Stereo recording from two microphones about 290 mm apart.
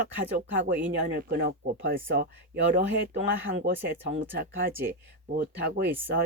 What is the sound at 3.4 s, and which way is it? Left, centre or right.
Speech, right.